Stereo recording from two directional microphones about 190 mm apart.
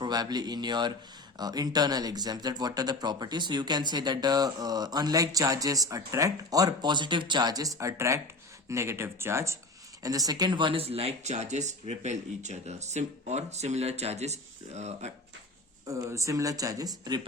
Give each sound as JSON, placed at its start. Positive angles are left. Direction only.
{"t": 0.0, "sound": "speech", "side_deg": -20}
{"t": 15.9, "sound": "speech", "side_deg": -15}